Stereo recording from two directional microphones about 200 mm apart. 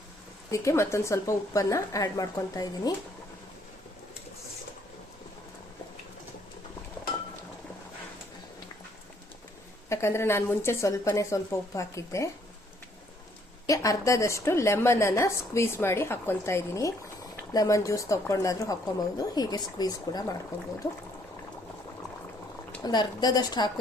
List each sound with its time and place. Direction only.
0.5 s a woman's voice: 15° left (ahead or behind)
9.9 s a woman's voice: 15° left (ahead or behind)
13.7 s a woman's voice: 15° left (ahead or behind)
22.8 s a woman's voice: 20° left (ahead or behind)